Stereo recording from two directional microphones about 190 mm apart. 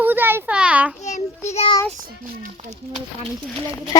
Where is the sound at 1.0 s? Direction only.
40° left (ahead or behind).